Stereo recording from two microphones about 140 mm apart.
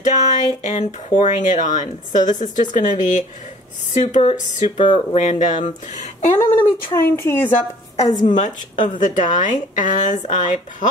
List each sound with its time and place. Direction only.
0.0 s speech: 60° left (ahead or behind)
4.6 s speech: 55° left (ahead or behind)
6.3 s speech: 15° left (ahead or behind)
8.0 s a woman's voice: 30° left (ahead or behind)
8.3 s speech: 65° left (ahead or behind)